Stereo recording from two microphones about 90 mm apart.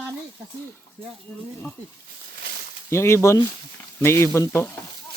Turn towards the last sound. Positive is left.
turn(degrees=25)  # may be behind; listen again after turning